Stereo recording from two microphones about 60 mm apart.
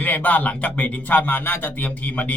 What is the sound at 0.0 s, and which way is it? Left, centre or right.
A man's voice, left.